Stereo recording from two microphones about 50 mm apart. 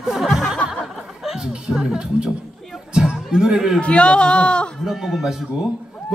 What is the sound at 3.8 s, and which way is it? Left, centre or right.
Speech, left.